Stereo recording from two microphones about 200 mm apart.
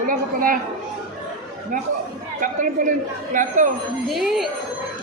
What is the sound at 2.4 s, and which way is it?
A woman's voice, 40° right (ahead or behind).